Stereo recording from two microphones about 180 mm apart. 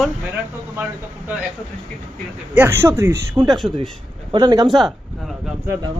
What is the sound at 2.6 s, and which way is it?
Speech, 15° right (ahead or behind).